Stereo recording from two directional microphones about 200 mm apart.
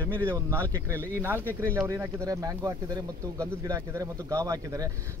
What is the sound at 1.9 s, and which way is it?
Speech, 15° right (ahead or behind).